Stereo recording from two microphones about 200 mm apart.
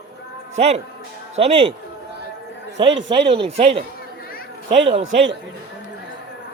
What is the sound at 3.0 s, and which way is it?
Speech, 25° right (ahead or behind).